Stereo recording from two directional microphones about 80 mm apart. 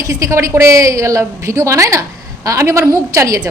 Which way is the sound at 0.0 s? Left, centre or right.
Right.